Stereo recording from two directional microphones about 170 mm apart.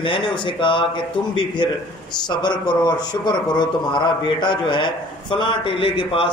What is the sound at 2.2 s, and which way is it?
Speech, 25° left (ahead or behind).